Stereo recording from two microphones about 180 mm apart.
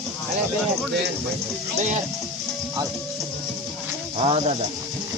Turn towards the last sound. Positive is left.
turn(degrees=-30)  # may be behind; listen again after turning